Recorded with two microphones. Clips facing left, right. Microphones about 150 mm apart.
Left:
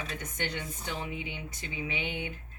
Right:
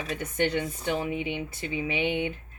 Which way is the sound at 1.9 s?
70° right (ahead or behind).